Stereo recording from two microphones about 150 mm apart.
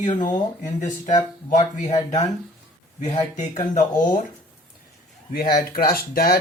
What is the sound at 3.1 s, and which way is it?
Speech, 30° left (ahead or behind).